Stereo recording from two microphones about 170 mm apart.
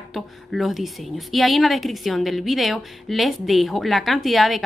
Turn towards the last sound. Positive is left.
turn(degrees=0)  # may be behind; listen again after turning